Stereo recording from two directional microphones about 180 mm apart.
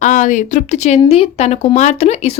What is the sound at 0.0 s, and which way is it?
Speech, 45° left (ahead or behind).